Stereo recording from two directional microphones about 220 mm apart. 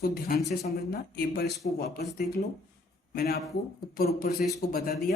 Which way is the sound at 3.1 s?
45° left (ahead or behind).